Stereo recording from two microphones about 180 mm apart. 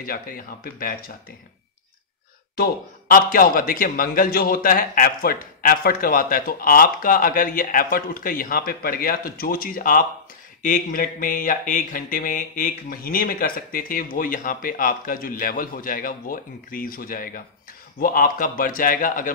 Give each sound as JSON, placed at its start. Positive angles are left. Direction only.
{"t": 0.7, "sound": "speech", "side_deg": 55}
{"t": 2.5, "sound": "a man's voice", "side_deg": 55}